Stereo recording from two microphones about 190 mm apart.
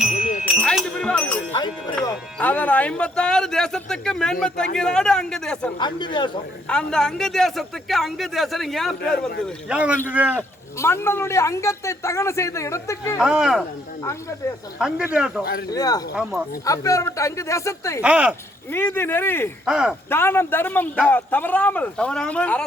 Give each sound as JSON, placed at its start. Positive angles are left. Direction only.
{"t": 0.2, "sound": "music", "side_deg": -5}
{"t": 0.5, "sound": "a sound", "side_deg": 5}
{"t": 2.4, "sound": "speech", "side_deg": 10}
{"t": 5.8, "sound": "speech", "side_deg": 25}
{"t": 6.7, "sound": "speech", "side_deg": 5}
{"t": 10.8, "sound": "a man's voice", "side_deg": 15}
{"t": 13.1, "sound": "speech", "side_deg": 0}
{"t": 14.0, "sound": "a man's voice", "side_deg": 15}
{"t": 14.8, "sound": "speech", "side_deg": -5}
{"t": 15.7, "sound": "a man's voice", "side_deg": 20}
{"t": 18.0, "sound": "speech", "side_deg": -5}
{"t": 18.7, "sound": "a man's voice", "side_deg": 10}
{"t": 19.6, "sound": "speech", "side_deg": -5}
{"t": 20.1, "sound": "a man's voice", "side_deg": 10}